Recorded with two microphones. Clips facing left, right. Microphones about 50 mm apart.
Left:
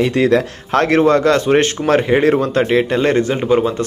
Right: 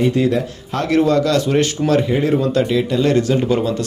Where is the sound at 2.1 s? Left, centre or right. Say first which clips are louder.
Left 4 dB; left.